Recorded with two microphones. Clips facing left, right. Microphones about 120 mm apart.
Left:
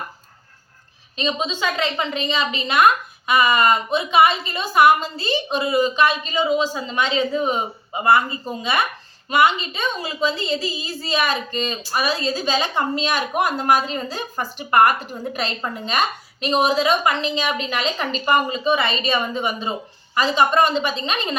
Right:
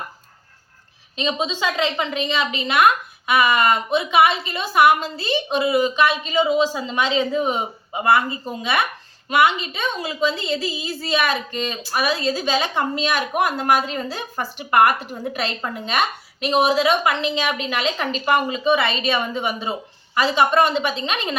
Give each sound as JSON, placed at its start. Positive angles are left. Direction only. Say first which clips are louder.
{"t": 1.1, "sound": "a woman's voice", "louder": "even", "side_deg": -15}